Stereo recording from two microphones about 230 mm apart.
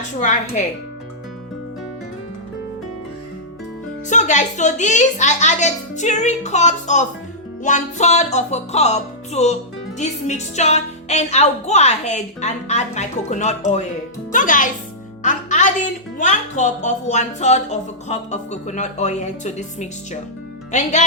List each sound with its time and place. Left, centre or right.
0.2 s speech: left
4.1 s a woman's voice: left
15.2 s music: left
16.1 s speech: left